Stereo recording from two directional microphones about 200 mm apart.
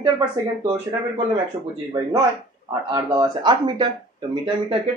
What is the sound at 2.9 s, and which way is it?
Speech, 20° right (ahead or behind).